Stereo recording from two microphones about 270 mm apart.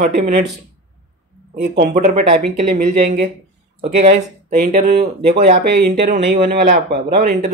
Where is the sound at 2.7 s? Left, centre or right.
Right.